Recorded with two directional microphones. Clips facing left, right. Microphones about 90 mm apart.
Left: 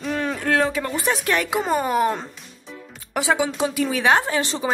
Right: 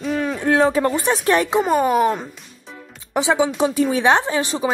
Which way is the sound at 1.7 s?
10° right (ahead or behind).